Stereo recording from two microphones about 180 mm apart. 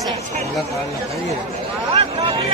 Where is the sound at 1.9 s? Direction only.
35° right (ahead or behind).